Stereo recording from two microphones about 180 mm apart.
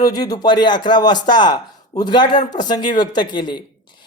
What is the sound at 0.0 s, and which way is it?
Speech, 20° left (ahead or behind).